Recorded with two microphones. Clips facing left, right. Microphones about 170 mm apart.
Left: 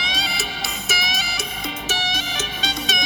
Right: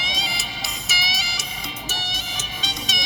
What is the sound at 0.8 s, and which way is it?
Music, 55° left (ahead or behind).